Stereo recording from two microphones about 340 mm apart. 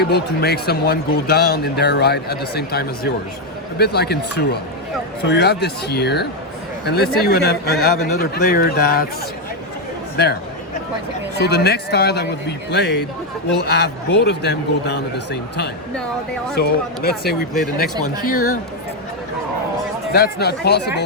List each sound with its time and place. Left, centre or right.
0.0 s speech: left
10.2 s speech: left
11.3 s speech: left
20.1 s speech: left